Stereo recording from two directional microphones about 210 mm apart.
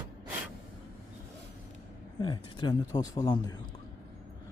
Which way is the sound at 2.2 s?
20° left (ahead or behind).